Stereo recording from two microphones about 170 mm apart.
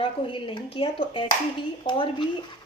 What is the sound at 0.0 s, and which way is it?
Speech, 30° left (ahead or behind).